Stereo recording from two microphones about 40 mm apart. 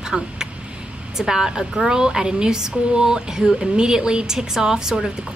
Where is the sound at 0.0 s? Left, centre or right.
Centre.